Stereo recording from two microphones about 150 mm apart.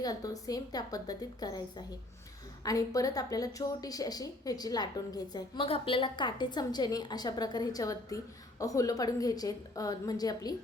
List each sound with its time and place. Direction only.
0.0 s a woman's voice: 25° left (ahead or behind)
5.6 s a woman's voice: 35° left (ahead or behind)